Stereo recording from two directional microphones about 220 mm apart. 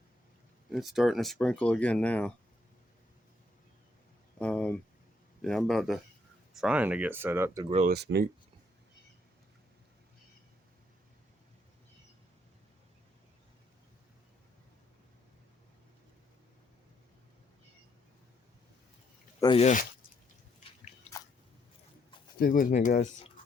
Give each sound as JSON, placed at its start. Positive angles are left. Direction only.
{"t": 0.7, "sound": "speech", "side_deg": 0}
{"t": 4.4, "sound": "a sound", "side_deg": 5}
{"t": 5.4, "sound": "a man's voice", "side_deg": 0}
{"t": 7.7, "sound": "speech", "side_deg": -30}
{"t": 7.9, "sound": "speech", "side_deg": -50}
{"t": 19.4, "sound": "speech", "side_deg": 25}
{"t": 22.4, "sound": "speech", "side_deg": 40}